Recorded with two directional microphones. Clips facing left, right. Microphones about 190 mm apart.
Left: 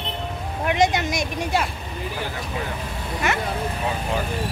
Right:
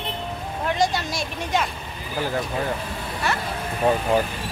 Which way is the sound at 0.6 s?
20° left (ahead or behind).